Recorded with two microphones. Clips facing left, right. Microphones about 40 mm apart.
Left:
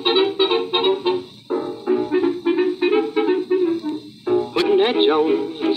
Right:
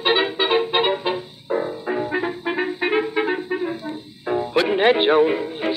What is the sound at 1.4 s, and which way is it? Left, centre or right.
Music, right.